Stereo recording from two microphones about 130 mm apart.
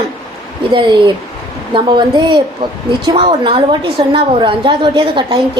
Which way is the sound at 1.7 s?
35° right (ahead or behind).